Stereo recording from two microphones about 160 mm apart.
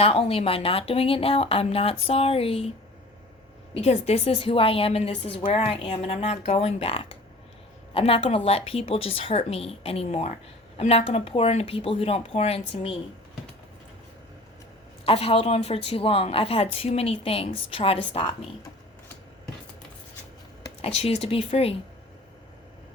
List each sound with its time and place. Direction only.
0.0 s a woman's voice: 35° left (ahead or behind)
3.8 s a woman's voice: 45° left (ahead or behind)
15.0 s a woman's voice: 35° left (ahead or behind)
20.8 s a woman's voice: 40° left (ahead or behind)